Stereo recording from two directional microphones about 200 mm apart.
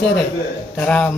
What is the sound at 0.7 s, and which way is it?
Speech, 5° left (ahead or behind).